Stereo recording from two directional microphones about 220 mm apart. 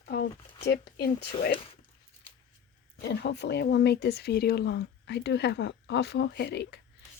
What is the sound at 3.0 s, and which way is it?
Speech, 50° left (ahead or behind).